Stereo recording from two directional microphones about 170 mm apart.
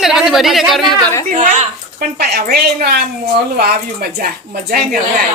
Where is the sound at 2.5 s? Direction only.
70° right (ahead or behind).